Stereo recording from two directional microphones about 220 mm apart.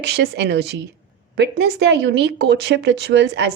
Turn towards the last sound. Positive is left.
turn(degrees=-50)  # may be behind; listen again after turning